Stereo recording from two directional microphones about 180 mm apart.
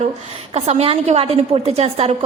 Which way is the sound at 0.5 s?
35° right (ahead or behind).